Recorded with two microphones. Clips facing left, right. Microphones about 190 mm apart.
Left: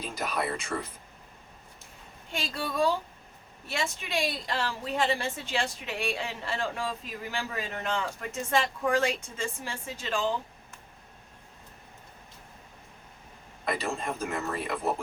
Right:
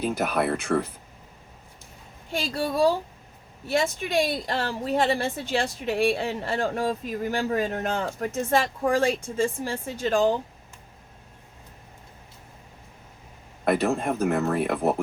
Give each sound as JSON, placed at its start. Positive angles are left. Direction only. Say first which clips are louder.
{"t": 0.0, "sound": "speech", "louder": "right 7 dB", "side_deg": -60}
{"t": 2.6, "sound": "a woman's voice", "louder": "right 5 dB", "side_deg": -40}
{"t": 13.7, "sound": "speech", "louder": "right 8 dB", "side_deg": -60}